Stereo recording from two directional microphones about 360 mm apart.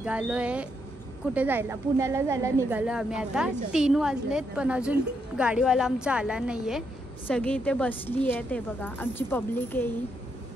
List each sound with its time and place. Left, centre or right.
0.0 s a woman's voice: centre